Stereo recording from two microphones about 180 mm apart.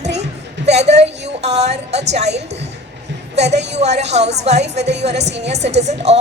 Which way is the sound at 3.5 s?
70° right (ahead or behind).